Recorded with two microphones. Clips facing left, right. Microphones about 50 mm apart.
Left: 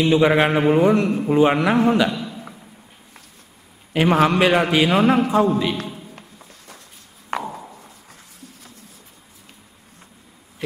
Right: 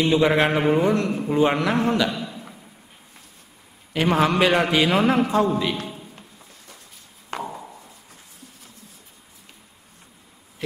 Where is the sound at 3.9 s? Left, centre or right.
Centre.